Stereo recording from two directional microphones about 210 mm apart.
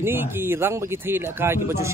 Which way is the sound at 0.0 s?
10° right (ahead or behind).